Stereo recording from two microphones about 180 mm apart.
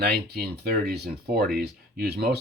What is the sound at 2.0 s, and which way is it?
Speech, 65° right (ahead or behind).